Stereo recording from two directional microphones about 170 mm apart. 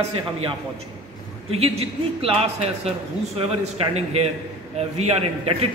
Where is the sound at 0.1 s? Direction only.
35° right (ahead or behind).